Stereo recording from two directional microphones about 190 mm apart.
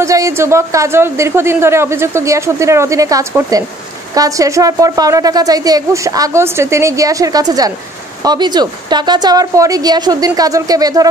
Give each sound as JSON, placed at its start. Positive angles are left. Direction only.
{"t": 0.0, "sound": "a woman's voice", "side_deg": -15}